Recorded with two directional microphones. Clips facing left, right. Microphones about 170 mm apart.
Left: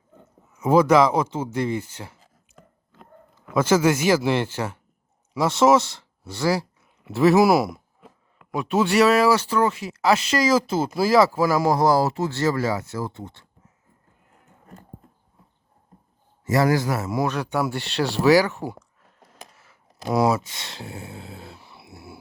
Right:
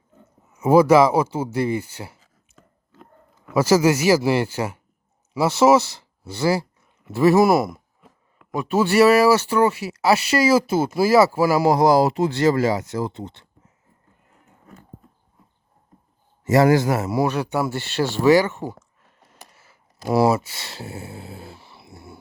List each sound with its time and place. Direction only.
0.5 s speech: 5° right (ahead or behind)
3.5 s speech: 10° right (ahead or behind)
16.4 s a man's voice: 20° right (ahead or behind)
17.1 s speech: 5° right (ahead or behind)
21.8 s wild animals: 5° left (ahead or behind)